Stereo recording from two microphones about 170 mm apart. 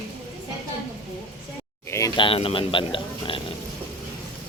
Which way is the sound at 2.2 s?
30° left (ahead or behind).